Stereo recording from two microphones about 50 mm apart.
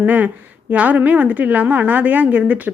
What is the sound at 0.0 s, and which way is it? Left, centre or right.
A woman's voice, right.